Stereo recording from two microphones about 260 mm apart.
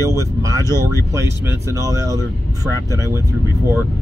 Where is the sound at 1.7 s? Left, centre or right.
Centre.